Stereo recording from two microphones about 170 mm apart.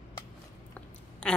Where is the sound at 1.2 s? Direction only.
5° left (ahead or behind).